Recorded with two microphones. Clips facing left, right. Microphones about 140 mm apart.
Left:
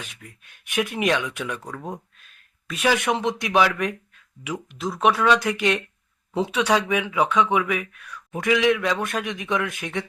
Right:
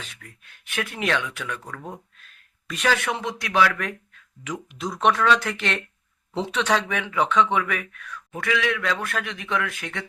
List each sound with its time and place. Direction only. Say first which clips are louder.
0.0 s speech: left 2 dB; 15° left (ahead or behind)
2.6 s speech: left 2 dB; centre (ahead or behind)
2.9 s speech: left 5 dB; 20° left (ahead or behind)
4.4 s speech: left 2 dB; centre (ahead or behind); by 10.1 s 20° left (ahead or behind)